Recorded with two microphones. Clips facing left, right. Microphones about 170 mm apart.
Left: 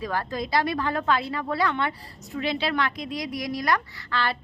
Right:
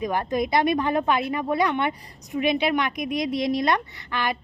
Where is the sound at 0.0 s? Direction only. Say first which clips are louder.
Right 5 dB; 20° right (ahead or behind).